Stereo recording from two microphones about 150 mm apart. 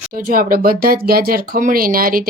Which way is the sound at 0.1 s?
70° right (ahead or behind).